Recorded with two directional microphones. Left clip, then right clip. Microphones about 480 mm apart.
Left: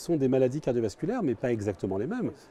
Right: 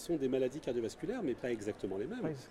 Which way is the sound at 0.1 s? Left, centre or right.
Left.